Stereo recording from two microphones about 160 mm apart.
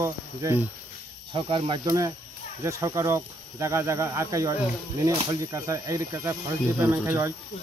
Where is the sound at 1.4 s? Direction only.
35° right (ahead or behind).